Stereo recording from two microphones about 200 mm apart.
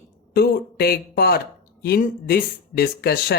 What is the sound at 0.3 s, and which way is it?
Speech, 50° left (ahead or behind).